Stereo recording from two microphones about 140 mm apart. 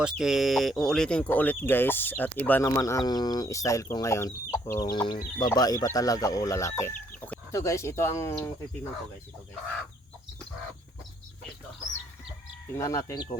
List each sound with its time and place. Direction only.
0.0 s speech: 5° right (ahead or behind); by 4.9 s 20° left (ahead or behind)
4.9 s speech: 30° left (ahead or behind)
12.7 s speech: 25° left (ahead or behind)